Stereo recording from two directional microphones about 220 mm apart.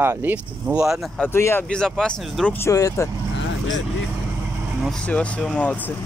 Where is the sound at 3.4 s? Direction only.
60° left (ahead or behind).